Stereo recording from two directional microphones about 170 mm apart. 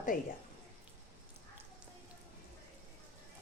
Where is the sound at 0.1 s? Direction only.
55° left (ahead or behind).